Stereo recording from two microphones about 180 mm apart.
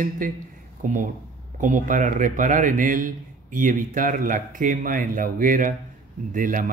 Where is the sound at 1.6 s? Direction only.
45° right (ahead or behind).